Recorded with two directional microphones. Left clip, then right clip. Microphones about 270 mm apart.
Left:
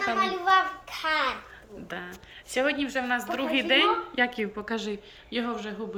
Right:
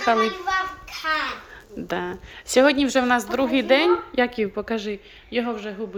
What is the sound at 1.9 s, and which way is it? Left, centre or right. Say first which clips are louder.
A woman's voice: right 10 dB; centre.